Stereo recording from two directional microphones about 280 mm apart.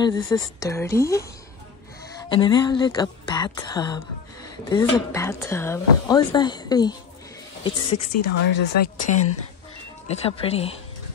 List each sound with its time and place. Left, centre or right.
0.0 s a woman's voice: centre